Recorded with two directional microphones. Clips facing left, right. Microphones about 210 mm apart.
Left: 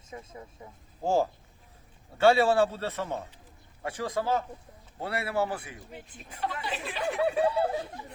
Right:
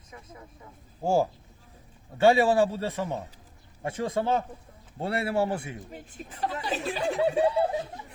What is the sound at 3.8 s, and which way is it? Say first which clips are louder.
A man's voice: right 3 dB; 25° right (ahead or behind).